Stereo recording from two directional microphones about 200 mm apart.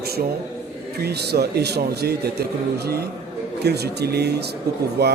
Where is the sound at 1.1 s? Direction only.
55° right (ahead or behind).